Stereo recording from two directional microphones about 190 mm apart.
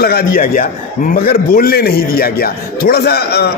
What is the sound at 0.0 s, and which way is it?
A man's voice, 50° left (ahead or behind).